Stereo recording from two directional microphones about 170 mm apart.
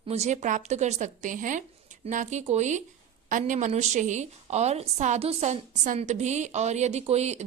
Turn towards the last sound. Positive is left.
turn(degrees=-40)  # may be behind; listen again after turning